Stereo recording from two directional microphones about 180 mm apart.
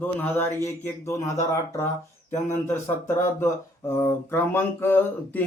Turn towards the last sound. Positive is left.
turn(degrees=10)  # may be behind; listen again after turning